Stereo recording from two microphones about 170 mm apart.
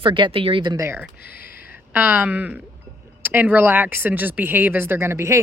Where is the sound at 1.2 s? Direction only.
65° left (ahead or behind).